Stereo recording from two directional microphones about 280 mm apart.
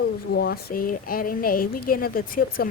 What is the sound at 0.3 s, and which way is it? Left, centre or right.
Speech, left.